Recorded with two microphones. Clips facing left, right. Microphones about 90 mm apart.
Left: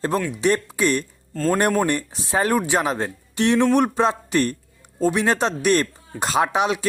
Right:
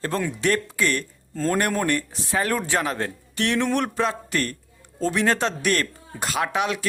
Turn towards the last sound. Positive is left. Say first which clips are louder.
# left 4 dB
turn(degrees=20)  # may be behind; listen again after turning